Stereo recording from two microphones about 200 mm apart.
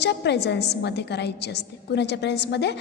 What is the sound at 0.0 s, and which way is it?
A woman's voice, 55° left (ahead or behind).